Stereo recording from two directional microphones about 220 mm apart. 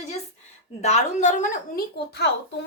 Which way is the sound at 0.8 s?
30° left (ahead or behind).